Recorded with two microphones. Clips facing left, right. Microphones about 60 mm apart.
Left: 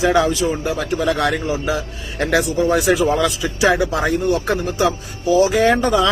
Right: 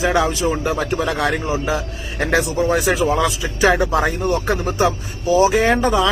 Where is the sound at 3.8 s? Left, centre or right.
Right.